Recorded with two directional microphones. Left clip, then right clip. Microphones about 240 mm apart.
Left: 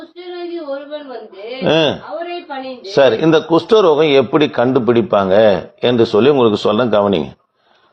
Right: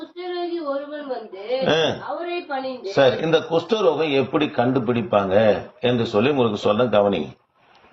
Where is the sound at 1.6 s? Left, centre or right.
Left.